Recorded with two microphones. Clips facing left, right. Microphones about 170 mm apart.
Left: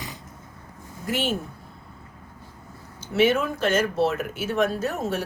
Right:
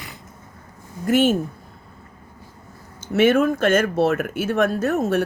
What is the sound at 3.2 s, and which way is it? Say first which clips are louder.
Speech: right 5 dB; 50° right (ahead or behind).